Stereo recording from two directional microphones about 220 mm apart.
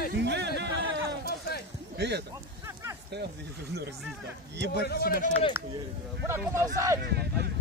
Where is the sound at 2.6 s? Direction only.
15° right (ahead or behind).